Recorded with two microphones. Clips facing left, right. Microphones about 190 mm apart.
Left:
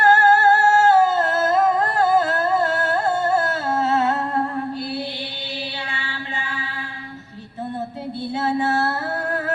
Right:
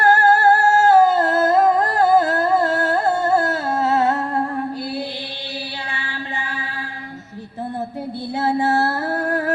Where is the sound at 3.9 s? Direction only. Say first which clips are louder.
Right 2 dB; 35° right (ahead or behind).